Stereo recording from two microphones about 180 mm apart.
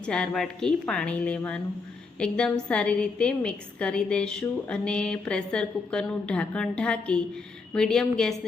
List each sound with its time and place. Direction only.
0.0 s a woman's voice: 5° left (ahead or behind)